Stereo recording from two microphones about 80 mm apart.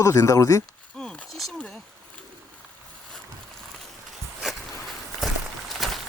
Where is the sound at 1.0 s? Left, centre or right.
Centre.